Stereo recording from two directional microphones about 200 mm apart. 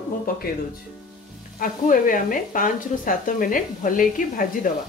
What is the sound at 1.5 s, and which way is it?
Speech, 45° left (ahead or behind).